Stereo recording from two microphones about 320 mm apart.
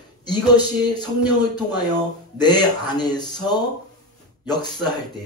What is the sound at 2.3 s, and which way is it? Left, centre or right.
Speech, centre.